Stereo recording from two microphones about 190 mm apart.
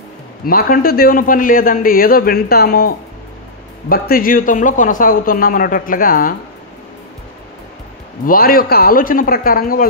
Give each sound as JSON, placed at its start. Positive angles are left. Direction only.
{"t": 0.5, "sound": "a man's voice", "side_deg": 50}
{"t": 3.9, "sound": "a man's voice", "side_deg": 50}
{"t": 8.3, "sound": "a man's voice", "side_deg": 50}